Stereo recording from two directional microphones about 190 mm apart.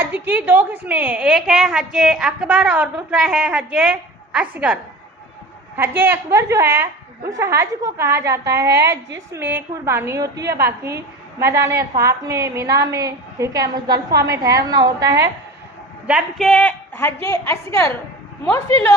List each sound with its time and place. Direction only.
0.0 s a woman's voice: 10° right (ahead or behind)
8.6 s a woman's voice: 60° right (ahead or behind)
9.3 s a woman's voice: 10° right (ahead or behind)
14.1 s a woman's voice: 55° right (ahead or behind)
14.4 s a woman's voice: 20° right (ahead or behind)
16.0 s a woman's voice: 5° right (ahead or behind)
16.5 s a woman's voice: 5° left (ahead or behind)